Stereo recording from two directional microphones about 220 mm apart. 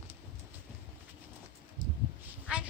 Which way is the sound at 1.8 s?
60° right (ahead or behind).